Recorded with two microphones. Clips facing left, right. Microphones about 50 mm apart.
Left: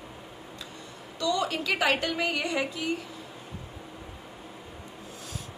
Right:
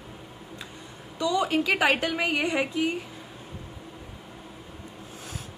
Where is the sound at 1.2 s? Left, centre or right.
Centre.